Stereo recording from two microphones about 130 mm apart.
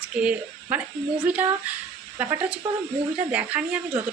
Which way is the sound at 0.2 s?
10° right (ahead or behind).